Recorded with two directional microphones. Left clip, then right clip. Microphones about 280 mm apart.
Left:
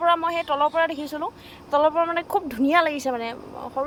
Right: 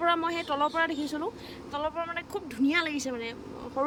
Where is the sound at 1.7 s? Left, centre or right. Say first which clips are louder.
Left 12 dB; centre.